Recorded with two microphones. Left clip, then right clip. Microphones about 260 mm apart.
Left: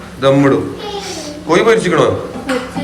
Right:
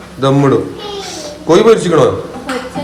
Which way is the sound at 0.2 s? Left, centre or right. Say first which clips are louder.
Even; centre.